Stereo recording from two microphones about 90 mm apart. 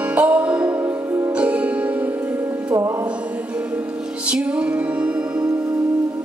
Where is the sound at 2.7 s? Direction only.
30° right (ahead or behind).